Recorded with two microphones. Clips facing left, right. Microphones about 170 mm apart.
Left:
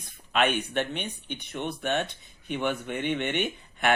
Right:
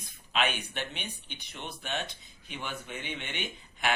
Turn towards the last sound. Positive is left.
turn(degrees=60)  # may be behind; listen again after turning